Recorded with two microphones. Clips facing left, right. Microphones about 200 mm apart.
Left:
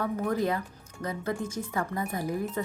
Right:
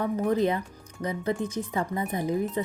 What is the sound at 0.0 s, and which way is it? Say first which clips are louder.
Speech: right 4 dB; 20° right (ahead or behind).